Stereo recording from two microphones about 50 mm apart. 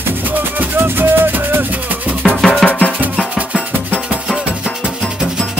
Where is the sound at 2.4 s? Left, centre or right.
Centre.